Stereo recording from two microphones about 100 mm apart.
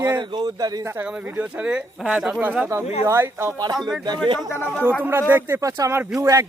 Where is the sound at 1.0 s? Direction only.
15° right (ahead or behind).